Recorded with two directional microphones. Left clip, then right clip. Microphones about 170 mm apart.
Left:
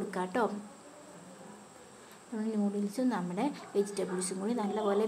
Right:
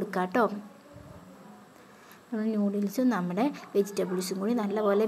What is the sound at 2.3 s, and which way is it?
A woman's voice, 20° right (ahead or behind).